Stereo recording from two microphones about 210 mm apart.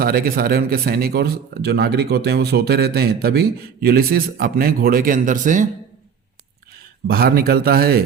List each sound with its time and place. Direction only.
0.0 s speech: 45° right (ahead or behind)
7.1 s speech: 45° right (ahead or behind)